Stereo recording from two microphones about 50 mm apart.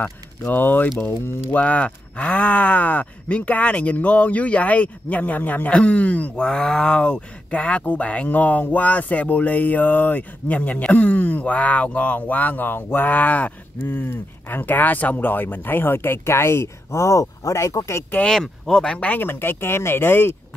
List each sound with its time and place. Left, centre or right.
0.5 s speech: left
6.3 s speech: centre
13.8 s speech: left
18.3 s speech: centre
18.9 s speech: left
19.1 s speech: left